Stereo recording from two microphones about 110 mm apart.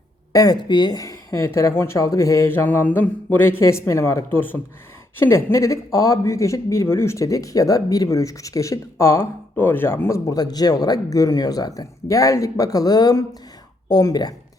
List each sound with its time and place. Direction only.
0.3 s speech: 35° left (ahead or behind)